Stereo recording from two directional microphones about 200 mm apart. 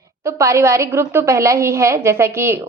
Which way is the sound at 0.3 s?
15° right (ahead or behind).